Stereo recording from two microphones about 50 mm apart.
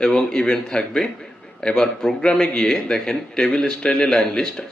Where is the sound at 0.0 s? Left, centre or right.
Centre.